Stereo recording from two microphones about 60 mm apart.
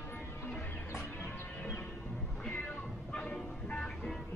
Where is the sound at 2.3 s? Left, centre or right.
Centre.